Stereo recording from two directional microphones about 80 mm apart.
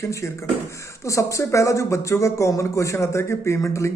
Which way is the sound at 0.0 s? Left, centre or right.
Left.